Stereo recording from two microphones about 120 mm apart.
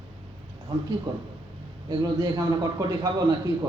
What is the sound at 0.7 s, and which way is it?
Speech, 40° right (ahead or behind).